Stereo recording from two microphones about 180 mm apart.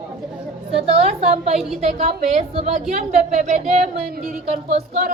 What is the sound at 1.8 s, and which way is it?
A woman's voice, 35° right (ahead or behind).